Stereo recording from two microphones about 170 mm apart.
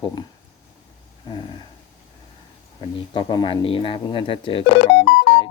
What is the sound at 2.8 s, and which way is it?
Speech, 30° left (ahead or behind).